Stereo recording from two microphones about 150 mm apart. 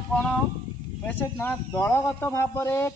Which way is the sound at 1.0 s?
10° left (ahead or behind).